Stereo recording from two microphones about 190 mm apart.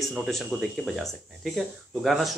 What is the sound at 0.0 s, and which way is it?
Speech, centre (ahead or behind).